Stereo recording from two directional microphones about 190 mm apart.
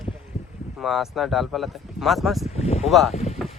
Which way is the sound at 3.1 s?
35° left (ahead or behind).